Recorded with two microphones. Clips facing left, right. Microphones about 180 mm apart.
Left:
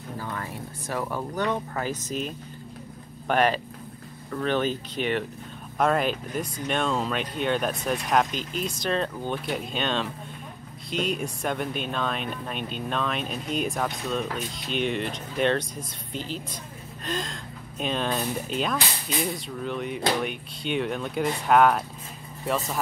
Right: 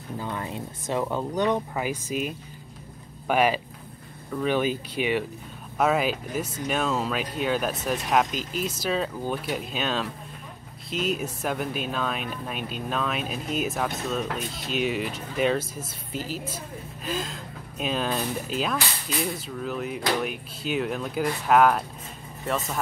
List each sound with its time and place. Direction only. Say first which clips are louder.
0.2 s speech: right 3 dB; 20° right (ahead or behind); by 21.8 s centre (ahead or behind)